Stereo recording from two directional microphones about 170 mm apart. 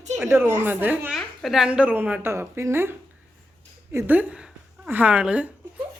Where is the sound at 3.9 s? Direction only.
10° right (ahead or behind).